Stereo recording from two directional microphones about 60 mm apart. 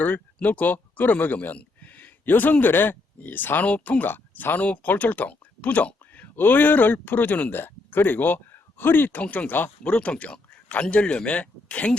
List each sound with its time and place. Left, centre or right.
0.3 s speech: left
9.2 s speech: left
9.8 s speech: left